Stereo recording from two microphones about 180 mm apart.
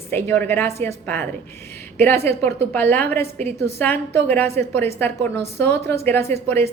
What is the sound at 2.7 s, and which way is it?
A woman's voice, 10° left (ahead or behind).